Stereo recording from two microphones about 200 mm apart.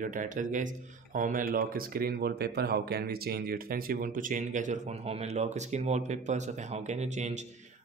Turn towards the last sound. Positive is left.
turn(degrees=-35)  # may be behind; listen again after turning